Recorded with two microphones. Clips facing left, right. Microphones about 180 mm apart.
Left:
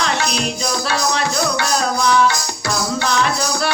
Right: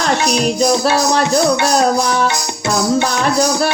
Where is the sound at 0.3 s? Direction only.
45° right (ahead or behind).